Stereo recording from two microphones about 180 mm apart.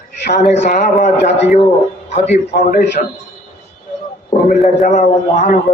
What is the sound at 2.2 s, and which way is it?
Speech, 60° left (ahead or behind).